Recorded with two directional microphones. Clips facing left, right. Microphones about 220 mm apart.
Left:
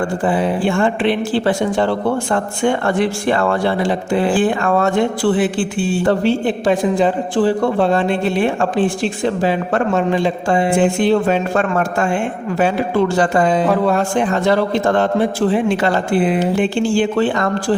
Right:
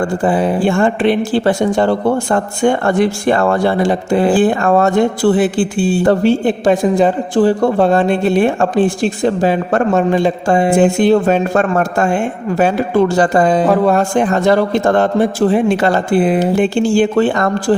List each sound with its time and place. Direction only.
0.3 s speech: 40° right (ahead or behind)